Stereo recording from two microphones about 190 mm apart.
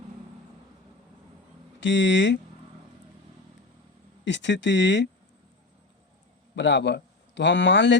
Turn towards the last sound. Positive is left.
turn(degrees=70)  # may be behind; listen again after turning